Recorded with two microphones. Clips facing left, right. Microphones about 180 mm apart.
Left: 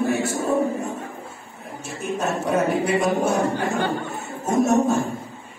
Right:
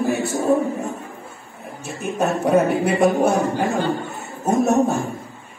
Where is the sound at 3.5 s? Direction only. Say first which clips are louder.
Right 3 dB; 60° left (ahead or behind).